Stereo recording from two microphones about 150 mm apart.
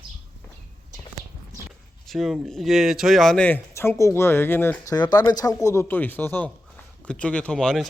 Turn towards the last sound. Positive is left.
turn(degrees=5)  # may be behind; listen again after turning